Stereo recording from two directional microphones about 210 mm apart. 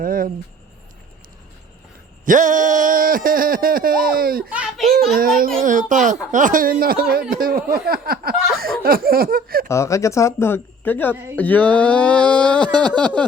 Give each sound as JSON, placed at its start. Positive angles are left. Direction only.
{"t": 0.0, "sound": "speech", "side_deg": -40}
{"t": 2.2, "sound": "speech", "side_deg": -35}
{"t": 4.5, "sound": "children playing", "side_deg": 0}
{"t": 5.1, "sound": "speech", "side_deg": -45}
{"t": 8.5, "sound": "a sound", "side_deg": -45}
{"t": 9.6, "sound": "speech", "side_deg": 15}
{"t": 11.1, "sound": "speech", "side_deg": -10}
{"t": 11.3, "sound": "speech", "side_deg": 5}